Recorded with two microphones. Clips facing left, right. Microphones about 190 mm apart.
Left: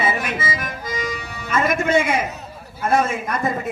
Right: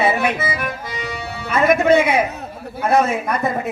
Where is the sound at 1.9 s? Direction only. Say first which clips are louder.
Right 4 dB; 65° right (ahead or behind).